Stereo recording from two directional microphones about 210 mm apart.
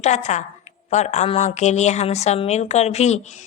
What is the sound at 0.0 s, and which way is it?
Speech, 35° left (ahead or behind).